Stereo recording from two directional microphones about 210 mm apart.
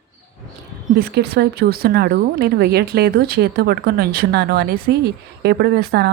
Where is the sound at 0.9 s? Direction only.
50° right (ahead or behind).